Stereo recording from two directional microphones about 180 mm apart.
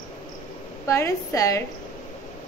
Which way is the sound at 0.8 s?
15° left (ahead or behind).